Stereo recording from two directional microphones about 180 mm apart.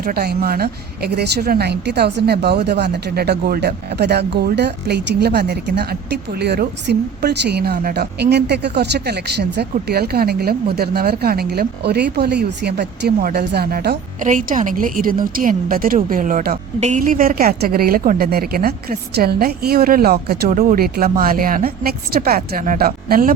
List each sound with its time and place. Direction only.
0.0 s a woman's voice: 60° right (ahead or behind)
20.5 s a woman's voice: 50° right (ahead or behind)